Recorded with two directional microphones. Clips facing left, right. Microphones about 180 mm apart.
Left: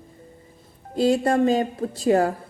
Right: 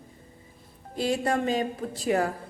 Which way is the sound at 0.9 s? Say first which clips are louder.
Left 7 dB; 30° left (ahead or behind).